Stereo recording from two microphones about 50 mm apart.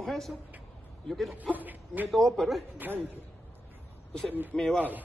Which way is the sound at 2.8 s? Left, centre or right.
Right.